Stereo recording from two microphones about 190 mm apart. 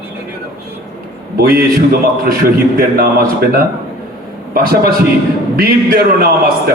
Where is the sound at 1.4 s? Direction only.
55° right (ahead or behind).